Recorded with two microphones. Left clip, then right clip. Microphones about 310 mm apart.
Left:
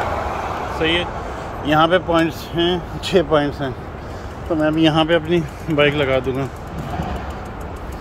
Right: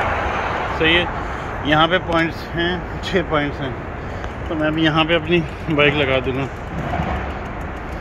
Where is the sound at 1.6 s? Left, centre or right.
Centre.